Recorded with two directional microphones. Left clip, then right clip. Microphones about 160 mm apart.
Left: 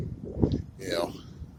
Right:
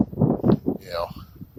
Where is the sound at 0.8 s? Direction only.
10° left (ahead or behind).